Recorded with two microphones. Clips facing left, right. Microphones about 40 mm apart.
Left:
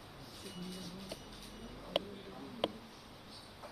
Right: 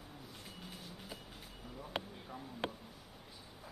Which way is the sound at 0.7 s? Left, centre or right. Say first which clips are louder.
Left 3 dB; right.